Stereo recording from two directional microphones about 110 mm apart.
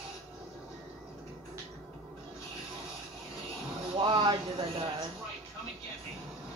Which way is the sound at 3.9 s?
45° right (ahead or behind).